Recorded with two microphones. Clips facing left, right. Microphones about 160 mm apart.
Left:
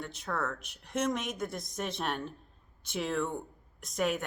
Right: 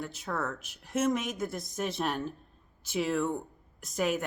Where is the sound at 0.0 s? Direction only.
Centre (ahead or behind).